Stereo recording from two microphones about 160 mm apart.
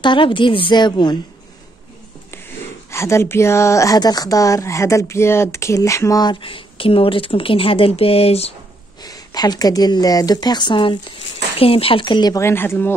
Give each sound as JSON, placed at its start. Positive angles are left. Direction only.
{"t": 0.0, "sound": "a woman's voice", "side_deg": 30}
{"t": 2.9, "sound": "speech", "side_deg": 15}
{"t": 9.0, "sound": "speech", "side_deg": 25}